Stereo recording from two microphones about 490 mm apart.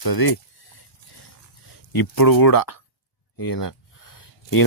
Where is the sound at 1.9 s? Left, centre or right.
Left.